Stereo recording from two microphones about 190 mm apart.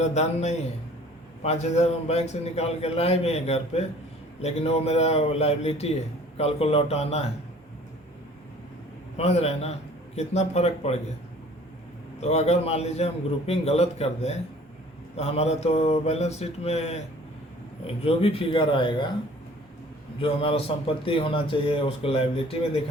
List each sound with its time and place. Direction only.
0.0 s a man's voice: 35° left (ahead or behind)
9.1 s a man's voice: 35° left (ahead or behind)
12.2 s a man's voice: 35° left (ahead or behind)
20.2 s a man's voice: 30° left (ahead or behind)